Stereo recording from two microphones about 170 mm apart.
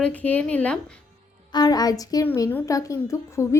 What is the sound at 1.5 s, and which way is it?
A woman's voice, 25° left (ahead or behind).